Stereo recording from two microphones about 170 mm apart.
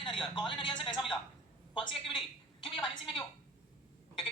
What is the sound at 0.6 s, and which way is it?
Speech, 25° left (ahead or behind).